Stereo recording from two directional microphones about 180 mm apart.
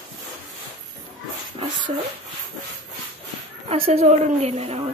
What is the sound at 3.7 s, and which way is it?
Speech, 35° right (ahead or behind).